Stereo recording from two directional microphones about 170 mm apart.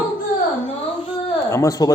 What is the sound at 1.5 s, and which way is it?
Speech, 20° left (ahead or behind).